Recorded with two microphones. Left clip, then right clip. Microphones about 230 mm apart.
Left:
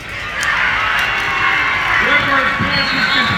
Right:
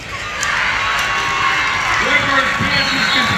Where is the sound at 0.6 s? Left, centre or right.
Right.